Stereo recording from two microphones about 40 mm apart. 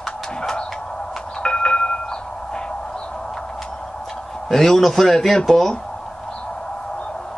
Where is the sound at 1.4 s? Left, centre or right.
Left.